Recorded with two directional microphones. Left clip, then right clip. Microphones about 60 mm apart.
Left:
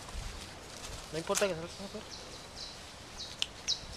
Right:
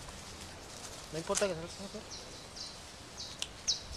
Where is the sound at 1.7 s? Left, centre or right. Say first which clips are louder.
Left 1 dB; centre.